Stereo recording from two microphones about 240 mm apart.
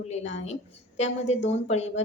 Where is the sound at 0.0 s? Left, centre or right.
Left.